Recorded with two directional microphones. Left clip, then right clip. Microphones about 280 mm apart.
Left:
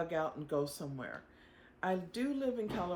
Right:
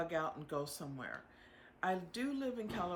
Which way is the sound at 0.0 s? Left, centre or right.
Centre.